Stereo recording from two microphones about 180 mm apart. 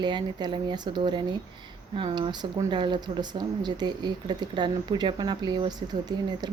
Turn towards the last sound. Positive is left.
turn(degrees=-20)  # may be behind; listen again after turning